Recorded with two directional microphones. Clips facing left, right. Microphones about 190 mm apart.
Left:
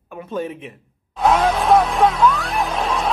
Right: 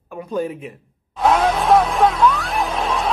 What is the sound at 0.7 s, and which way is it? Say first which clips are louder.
Music: even; centre (ahead or behind).